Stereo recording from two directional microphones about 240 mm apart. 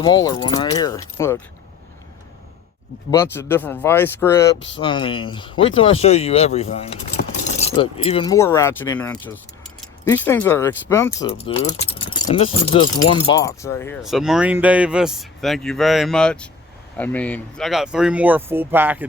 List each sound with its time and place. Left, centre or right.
0.0 s speech: centre
3.1 s speech: centre
11.3 s speech: left
14.0 s speech: centre